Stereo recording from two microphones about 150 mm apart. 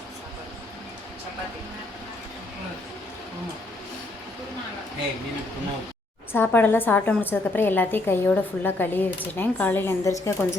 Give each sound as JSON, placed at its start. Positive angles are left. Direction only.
{"t": 6.3, "sound": "a woman's voice", "side_deg": 15}